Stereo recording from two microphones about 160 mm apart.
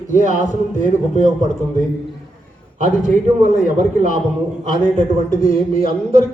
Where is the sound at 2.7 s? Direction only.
50° right (ahead or behind).